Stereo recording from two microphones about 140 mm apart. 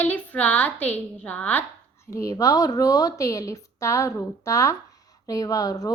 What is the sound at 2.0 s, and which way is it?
A woman's voice, 20° left (ahead or behind).